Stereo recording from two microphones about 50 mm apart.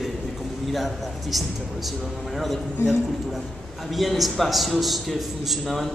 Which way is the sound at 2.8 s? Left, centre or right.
Left.